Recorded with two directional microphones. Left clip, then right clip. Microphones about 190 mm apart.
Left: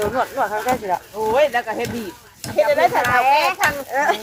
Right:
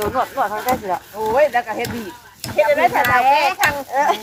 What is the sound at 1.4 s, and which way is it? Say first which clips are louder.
A child's voice: right 2 dB; 40° left (ahead or behind).